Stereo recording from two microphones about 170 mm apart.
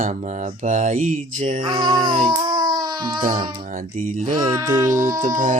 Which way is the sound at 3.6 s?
50° right (ahead or behind).